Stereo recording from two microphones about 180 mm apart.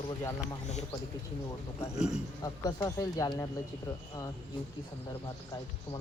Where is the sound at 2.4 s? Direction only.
20° left (ahead or behind).